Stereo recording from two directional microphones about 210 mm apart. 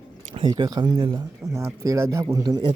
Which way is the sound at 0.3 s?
20° right (ahead or behind).